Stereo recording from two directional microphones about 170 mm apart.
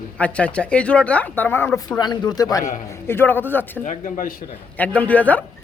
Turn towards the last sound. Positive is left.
turn(degrees=10)  # may be behind; listen again after turning